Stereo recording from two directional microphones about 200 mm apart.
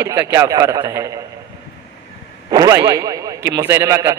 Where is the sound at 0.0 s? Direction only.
15° right (ahead or behind).